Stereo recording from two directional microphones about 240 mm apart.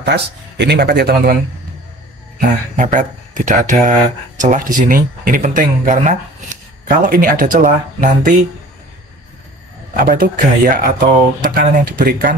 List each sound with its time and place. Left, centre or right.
0.0 s speech: right
2.7 s speech: right
9.9 s speech: right